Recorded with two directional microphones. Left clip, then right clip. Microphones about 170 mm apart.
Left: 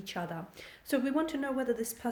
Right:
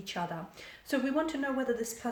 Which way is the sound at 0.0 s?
55° left (ahead or behind).